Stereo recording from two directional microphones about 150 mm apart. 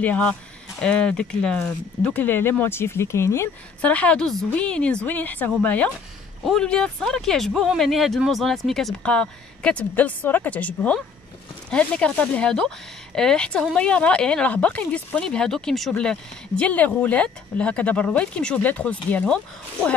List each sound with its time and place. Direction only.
0.0 s speech: 10° left (ahead or behind)